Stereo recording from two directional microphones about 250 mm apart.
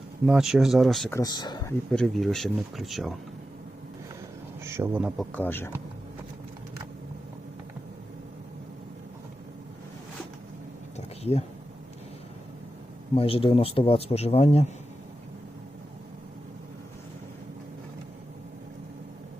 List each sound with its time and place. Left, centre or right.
0.3 s speech: centre
1.2 s speech: centre
1.9 s speech: centre
4.6 s a man's voice: centre
5.3 s speech: centre
10.9 s a sound: left
13.1 s speech: left